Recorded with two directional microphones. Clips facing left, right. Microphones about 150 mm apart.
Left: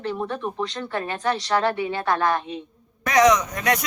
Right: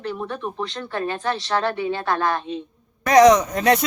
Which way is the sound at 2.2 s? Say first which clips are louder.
Even; 15° left (ahead or behind).